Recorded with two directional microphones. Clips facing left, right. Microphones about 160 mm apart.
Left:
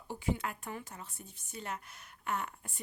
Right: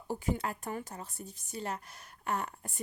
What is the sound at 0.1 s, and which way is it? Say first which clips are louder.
Speech: right 2 dB; 40° right (ahead or behind).